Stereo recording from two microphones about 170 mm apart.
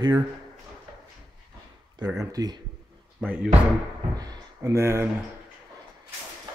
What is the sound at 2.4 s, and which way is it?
Speech, 20° right (ahead or behind).